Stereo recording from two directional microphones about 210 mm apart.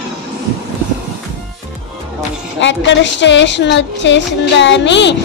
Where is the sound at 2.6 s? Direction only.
60° left (ahead or behind).